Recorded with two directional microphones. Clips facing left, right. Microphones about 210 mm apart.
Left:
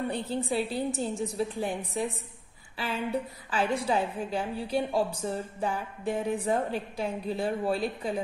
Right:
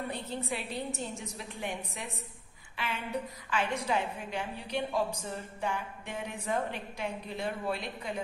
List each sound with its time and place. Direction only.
0.1 s a woman's voice: 30° left (ahead or behind)
3.4 s a woman's voice: 35° left (ahead or behind)